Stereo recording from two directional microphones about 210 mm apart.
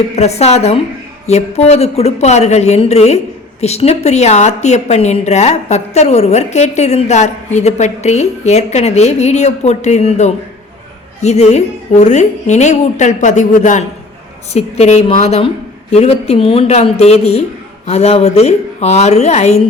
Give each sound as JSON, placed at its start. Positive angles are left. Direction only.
{"t": 0.2, "sound": "a woman's voice", "side_deg": 30}